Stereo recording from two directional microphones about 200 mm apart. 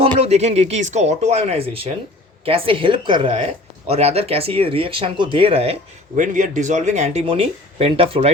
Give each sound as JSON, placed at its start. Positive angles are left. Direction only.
{"t": 0.0, "sound": "speech", "side_deg": -30}